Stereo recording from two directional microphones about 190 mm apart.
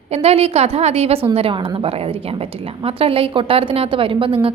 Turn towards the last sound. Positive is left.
turn(degrees=-30)  # may be behind; listen again after turning